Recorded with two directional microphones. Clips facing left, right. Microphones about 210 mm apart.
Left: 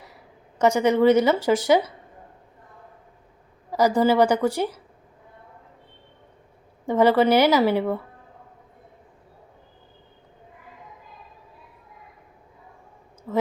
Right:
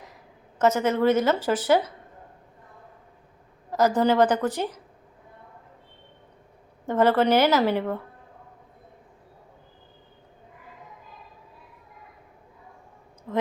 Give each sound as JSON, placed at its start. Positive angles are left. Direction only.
{"t": 0.6, "sound": "a woman's voice", "side_deg": 15}
{"t": 3.7, "sound": "a woman's voice", "side_deg": 10}
{"t": 6.8, "sound": "a woman's voice", "side_deg": 10}
{"t": 13.3, "sound": "a sound", "side_deg": 5}